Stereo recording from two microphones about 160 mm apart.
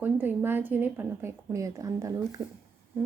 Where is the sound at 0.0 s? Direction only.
10° right (ahead or behind).